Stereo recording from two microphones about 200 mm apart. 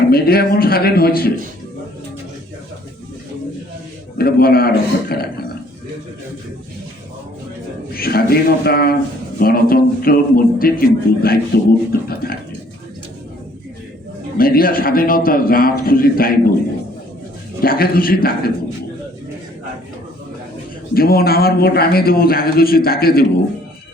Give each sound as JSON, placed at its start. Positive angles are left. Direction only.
{"t": 0.1, "sound": "a man's voice", "side_deg": 50}
{"t": 4.2, "sound": "a man's voice", "side_deg": 50}
{"t": 7.9, "sound": "a man's voice", "side_deg": 50}
{"t": 14.3, "sound": "a man's voice", "side_deg": 45}
{"t": 17.6, "sound": "a man's voice", "side_deg": 50}
{"t": 20.9, "sound": "a man's voice", "side_deg": 50}